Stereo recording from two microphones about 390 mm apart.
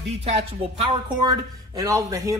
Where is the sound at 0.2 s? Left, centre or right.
Centre.